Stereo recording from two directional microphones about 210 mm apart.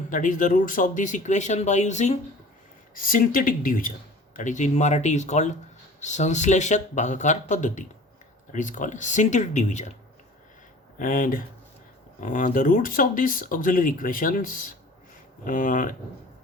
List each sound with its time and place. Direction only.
0.1 s speech: 40° left (ahead or behind)
11.0 s speech: 40° left (ahead or behind)